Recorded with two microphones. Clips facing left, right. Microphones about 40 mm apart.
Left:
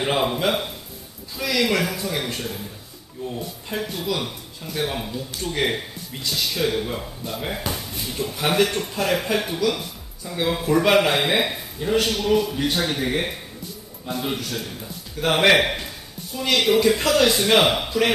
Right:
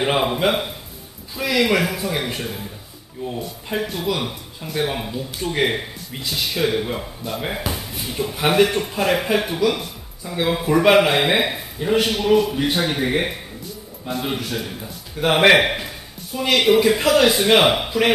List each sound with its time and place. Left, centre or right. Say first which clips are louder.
0.0 s speech: right 3 dB; centre